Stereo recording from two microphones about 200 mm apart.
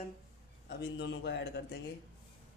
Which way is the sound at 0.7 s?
60° left (ahead or behind).